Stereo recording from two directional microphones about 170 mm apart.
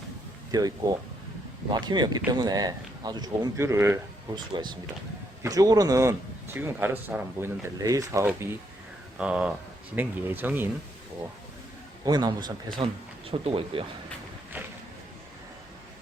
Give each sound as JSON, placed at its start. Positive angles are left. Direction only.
{"t": 0.5, "sound": "speech", "side_deg": -20}
{"t": 4.4, "sound": "a man's voice", "side_deg": -25}
{"t": 7.8, "sound": "a man's voice", "side_deg": -20}
{"t": 12.0, "sound": "speech", "side_deg": -25}